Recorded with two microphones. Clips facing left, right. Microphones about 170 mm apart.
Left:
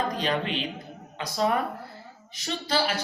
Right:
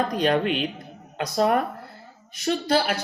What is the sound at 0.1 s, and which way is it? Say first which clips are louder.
A woman's voice: right 6 dB; 55° right (ahead or behind).